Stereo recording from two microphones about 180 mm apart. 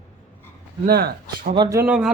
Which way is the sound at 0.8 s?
60° right (ahead or behind).